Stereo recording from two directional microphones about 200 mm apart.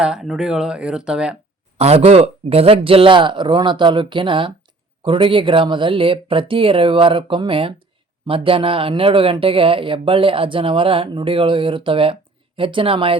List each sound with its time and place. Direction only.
0.0 s speech: centre (ahead or behind)
1.8 s speech: 30° right (ahead or behind)